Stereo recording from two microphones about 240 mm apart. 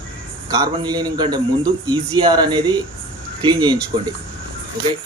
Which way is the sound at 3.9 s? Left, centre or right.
Right.